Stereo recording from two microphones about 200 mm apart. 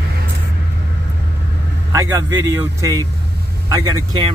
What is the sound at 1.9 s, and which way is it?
Speech, 15° right (ahead or behind).